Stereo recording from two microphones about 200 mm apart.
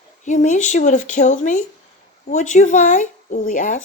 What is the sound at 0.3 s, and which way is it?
A woman's voice, 35° left (ahead or behind).